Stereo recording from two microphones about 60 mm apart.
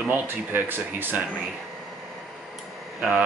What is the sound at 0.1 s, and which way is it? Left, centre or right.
Speech, right.